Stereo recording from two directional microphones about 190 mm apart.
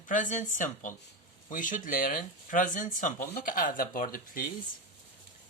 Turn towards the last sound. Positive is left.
turn(degrees=45)  # may be behind; listen again after turning